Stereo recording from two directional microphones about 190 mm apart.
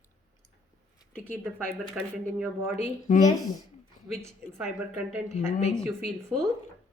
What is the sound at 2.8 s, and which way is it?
Speech, 40° left (ahead or behind).